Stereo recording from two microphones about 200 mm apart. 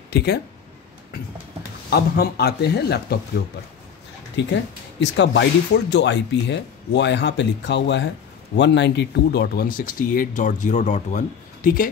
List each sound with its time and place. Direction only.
0.1 s speech: 55° left (ahead or behind)
1.9 s speech: 50° left (ahead or behind)
4.4 s speech: 60° left (ahead or behind); by 11.9 s 45° left (ahead or behind)